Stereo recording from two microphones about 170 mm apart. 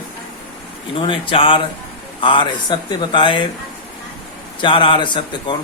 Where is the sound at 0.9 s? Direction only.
30° left (ahead or behind).